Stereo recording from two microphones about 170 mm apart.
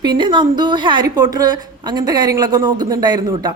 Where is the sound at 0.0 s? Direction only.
25° right (ahead or behind).